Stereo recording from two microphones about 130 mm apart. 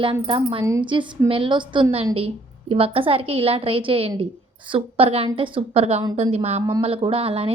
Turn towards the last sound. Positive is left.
turn(degrees=-50)  # may be behind; listen again after turning